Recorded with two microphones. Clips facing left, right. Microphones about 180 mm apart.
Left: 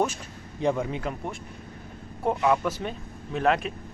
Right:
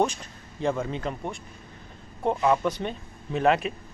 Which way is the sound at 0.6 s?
15° left (ahead or behind).